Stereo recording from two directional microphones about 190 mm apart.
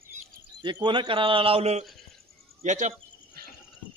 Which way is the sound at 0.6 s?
25° right (ahead or behind).